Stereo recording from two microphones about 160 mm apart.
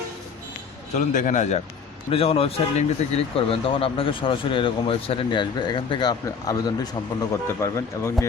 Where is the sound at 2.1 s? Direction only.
35° left (ahead or behind).